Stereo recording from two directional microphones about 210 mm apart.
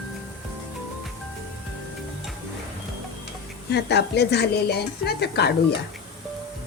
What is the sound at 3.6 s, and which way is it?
A woman's voice, 50° left (ahead or behind).